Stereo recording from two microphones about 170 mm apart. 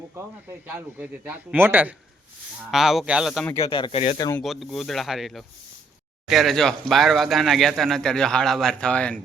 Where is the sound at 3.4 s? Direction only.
15° left (ahead or behind).